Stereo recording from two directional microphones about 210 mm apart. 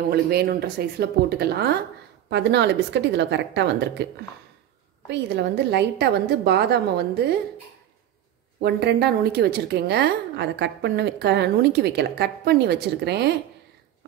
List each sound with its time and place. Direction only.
0.1 s a woman's voice: 50° right (ahead or behind)
8.5 s a woman's voice: 50° right (ahead or behind)